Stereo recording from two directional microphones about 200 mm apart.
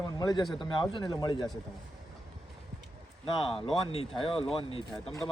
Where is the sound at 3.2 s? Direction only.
25° left (ahead or behind).